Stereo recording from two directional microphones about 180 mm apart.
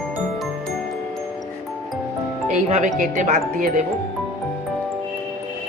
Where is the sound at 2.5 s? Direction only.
45° right (ahead or behind).